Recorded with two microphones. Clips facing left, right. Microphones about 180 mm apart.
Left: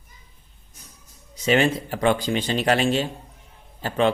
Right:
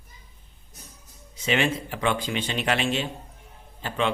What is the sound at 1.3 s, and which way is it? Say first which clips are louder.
A man's voice: left 5 dB; 40° left (ahead or behind).